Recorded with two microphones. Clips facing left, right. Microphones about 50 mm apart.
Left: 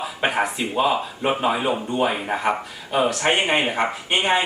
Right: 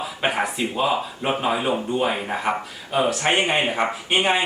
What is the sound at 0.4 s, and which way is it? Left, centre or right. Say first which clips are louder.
Speech: left 1 dB; centre.